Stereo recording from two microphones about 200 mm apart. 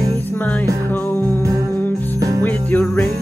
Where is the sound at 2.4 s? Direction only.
5° left (ahead or behind).